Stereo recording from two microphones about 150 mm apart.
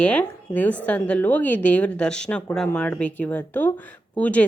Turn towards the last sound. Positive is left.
turn(degrees=10)  # may be behind; listen again after turning